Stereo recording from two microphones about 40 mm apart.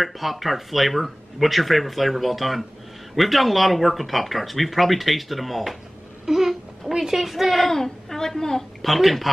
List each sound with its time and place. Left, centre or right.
0.0 s speech: centre
6.2 s a sound: centre
7.0 s speech: centre